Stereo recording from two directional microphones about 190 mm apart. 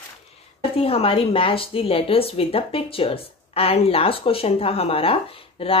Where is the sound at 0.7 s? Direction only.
30° left (ahead or behind).